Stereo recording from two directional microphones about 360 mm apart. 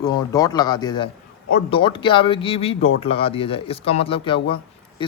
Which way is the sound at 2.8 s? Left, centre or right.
Left.